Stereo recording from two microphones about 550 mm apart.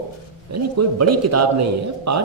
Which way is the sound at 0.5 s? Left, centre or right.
Right.